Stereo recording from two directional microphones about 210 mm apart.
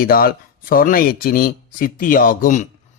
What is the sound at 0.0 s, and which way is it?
Speech, 45° left (ahead or behind).